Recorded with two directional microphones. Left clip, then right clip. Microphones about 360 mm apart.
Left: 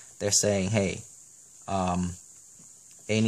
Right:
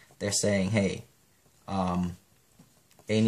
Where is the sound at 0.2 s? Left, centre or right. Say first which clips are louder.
Left 2 dB; left.